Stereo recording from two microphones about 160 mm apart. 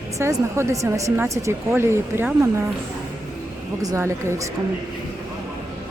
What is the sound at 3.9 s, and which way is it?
Speech, 15° right (ahead or behind).